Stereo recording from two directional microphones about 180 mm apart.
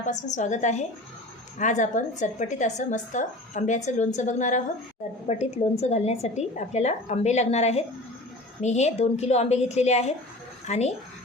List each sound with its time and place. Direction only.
0.0 s a woman's voice: 45° left (ahead or behind)